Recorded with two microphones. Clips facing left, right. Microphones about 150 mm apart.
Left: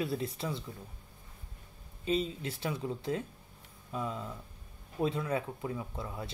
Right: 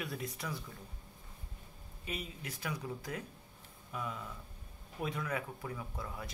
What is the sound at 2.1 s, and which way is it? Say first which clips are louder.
Speech: left 11 dB; 30° left (ahead or behind).